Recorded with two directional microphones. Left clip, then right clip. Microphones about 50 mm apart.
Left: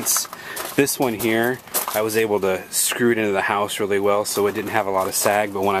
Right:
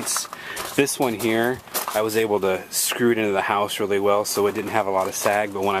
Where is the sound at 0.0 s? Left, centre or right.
Right.